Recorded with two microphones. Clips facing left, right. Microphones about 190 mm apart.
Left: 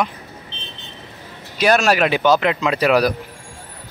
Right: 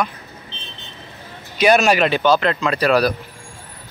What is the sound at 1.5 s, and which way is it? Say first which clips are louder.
Speech: right 1 dB; centre (ahead or behind).